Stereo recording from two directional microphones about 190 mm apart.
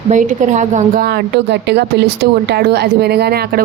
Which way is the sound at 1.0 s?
65° right (ahead or behind).